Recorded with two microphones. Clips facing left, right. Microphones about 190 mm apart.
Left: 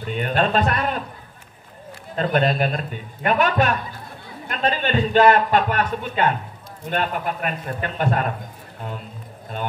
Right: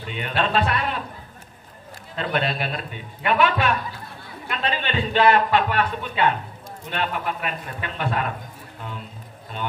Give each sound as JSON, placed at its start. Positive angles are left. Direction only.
{"t": 0.0, "sound": "a man's voice", "side_deg": 45}
{"t": 2.1, "sound": "a man's voice", "side_deg": 45}